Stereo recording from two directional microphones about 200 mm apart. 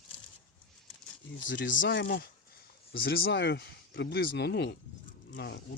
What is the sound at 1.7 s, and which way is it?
Speech, 65° left (ahead or behind).